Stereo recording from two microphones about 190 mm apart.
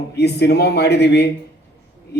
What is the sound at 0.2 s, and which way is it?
A man's voice, 60° left (ahead or behind).